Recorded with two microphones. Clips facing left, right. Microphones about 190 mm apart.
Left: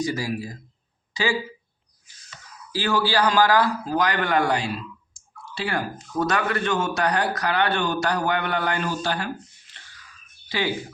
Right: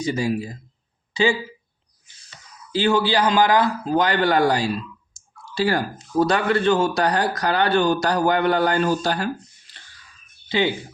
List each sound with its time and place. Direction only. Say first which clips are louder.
0.0 s a man's voice: right 3 dB; 25° right (ahead or behind)
2.7 s a man's voice: right 3 dB; 25° right (ahead or behind)
9.7 s whispering: right 1 dB; 35° right (ahead or behind)
10.5 s a man's voice: right 5 dB; 25° right (ahead or behind)